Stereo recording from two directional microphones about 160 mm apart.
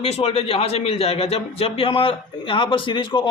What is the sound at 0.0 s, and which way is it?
A man's voice, 40° left (ahead or behind).